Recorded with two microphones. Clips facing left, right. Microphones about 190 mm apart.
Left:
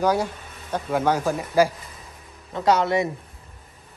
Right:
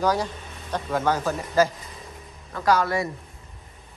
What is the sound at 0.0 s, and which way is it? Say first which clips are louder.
A man's voice: left 2 dB; 10° left (ahead or behind).